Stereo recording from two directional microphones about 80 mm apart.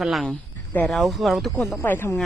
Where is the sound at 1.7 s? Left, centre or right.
Left.